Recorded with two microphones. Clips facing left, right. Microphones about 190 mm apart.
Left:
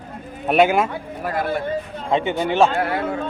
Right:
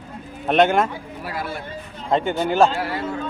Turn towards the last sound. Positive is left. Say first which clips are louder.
# left 4 dB
turn(degrees=55)  # may be behind; listen again after turning